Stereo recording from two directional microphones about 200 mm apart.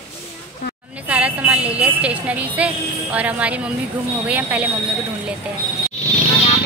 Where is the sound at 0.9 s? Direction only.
5° right (ahead or behind).